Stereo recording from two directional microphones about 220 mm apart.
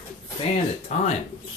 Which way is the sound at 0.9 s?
30° left (ahead or behind).